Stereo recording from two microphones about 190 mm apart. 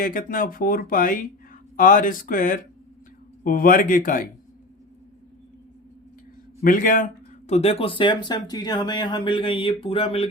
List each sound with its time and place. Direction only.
0.0 s speech: 45° left (ahead or behind)
6.6 s speech: 45° left (ahead or behind); by 10.2 s 30° left (ahead or behind)